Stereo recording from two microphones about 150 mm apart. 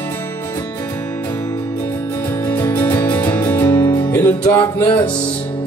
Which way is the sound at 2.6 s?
15° left (ahead or behind).